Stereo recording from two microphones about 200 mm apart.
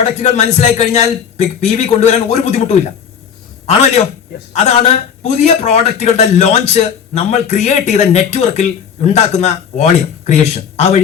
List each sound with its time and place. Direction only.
0.0 s a man's voice: 35° left (ahead or behind)